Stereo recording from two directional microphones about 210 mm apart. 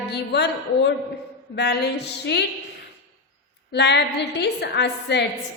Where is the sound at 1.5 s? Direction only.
50° left (ahead or behind).